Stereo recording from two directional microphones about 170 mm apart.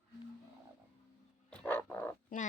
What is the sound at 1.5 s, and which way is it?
Dog, 10° left (ahead or behind).